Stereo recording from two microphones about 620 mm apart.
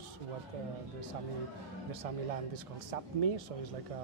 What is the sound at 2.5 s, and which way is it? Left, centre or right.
Speech, right.